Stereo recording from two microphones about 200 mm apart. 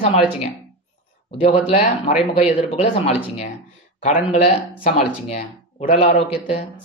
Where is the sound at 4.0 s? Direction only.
40° left (ahead or behind).